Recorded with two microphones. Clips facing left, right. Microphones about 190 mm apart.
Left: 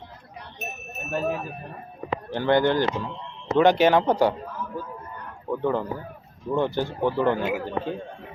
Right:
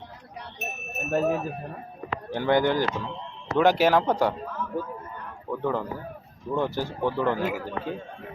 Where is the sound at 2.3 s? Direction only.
10° right (ahead or behind).